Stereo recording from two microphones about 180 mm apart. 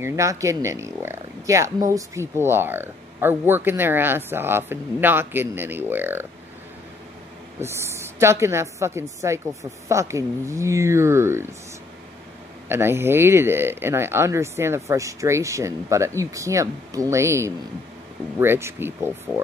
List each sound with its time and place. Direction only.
0.0 s speech: 15° right (ahead or behind)
7.6 s speech: 15° right (ahead or behind)
12.6 s speech: 15° right (ahead or behind)